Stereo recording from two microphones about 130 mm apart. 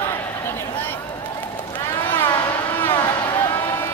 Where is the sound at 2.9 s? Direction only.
30° left (ahead or behind).